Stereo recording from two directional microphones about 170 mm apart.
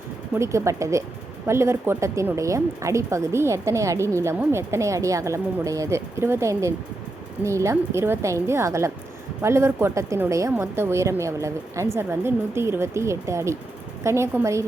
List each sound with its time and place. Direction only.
0.3 s speech: 15° right (ahead or behind)